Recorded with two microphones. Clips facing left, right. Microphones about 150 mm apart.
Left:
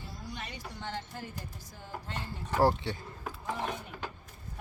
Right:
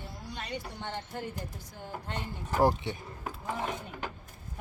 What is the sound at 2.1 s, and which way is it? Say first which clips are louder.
Speech: right 1 dB; 15° right (ahead or behind).